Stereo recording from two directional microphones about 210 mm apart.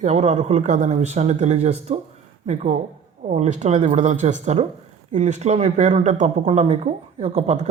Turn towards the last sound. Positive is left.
turn(degrees=-30)  # may be behind; listen again after turning